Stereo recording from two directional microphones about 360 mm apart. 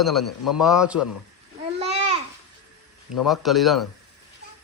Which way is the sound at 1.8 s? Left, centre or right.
Centre.